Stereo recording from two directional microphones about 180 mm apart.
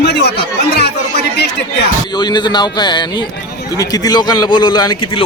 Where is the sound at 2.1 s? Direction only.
25° left (ahead or behind).